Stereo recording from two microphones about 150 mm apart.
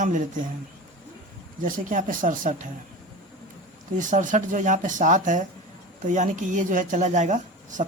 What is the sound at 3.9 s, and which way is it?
Speech, 60° right (ahead or behind).